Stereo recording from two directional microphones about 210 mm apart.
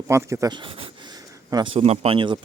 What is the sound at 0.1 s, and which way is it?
Speech, 15° right (ahead or behind).